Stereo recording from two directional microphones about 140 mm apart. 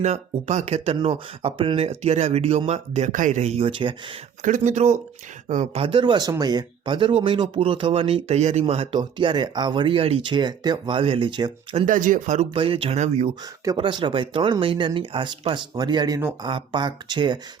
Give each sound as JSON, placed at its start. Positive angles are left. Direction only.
{"t": 0.0, "sound": "speech", "side_deg": -50}
{"t": 3.1, "sound": "speech", "side_deg": -65}
{"t": 4.4, "sound": "speech", "side_deg": -60}
{"t": 5.8, "sound": "speech", "side_deg": -35}
{"t": 11.9, "sound": "speech", "side_deg": -70}
{"t": 12.5, "sound": "speech", "side_deg": -40}
{"t": 13.7, "sound": "speech", "side_deg": -35}